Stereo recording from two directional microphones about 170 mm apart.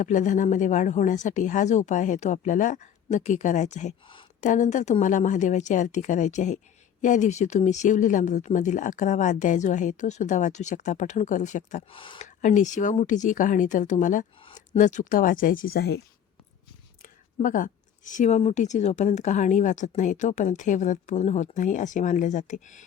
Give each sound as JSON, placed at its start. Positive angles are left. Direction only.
{"t": 0.0, "sound": "speech", "side_deg": 45}
{"t": 11.9, "sound": "speech", "side_deg": 30}
{"t": 12.2, "sound": "speech", "side_deg": 45}
{"t": 17.0, "sound": "speech", "side_deg": 50}